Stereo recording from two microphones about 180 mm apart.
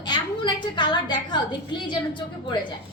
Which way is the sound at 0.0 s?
25° left (ahead or behind).